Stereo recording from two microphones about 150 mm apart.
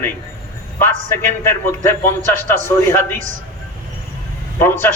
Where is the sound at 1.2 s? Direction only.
15° left (ahead or behind).